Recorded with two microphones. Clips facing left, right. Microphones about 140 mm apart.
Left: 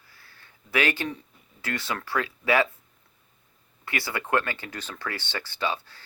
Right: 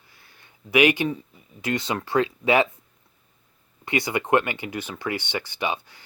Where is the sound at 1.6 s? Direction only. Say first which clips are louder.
Right 5 dB; 20° right (ahead or behind).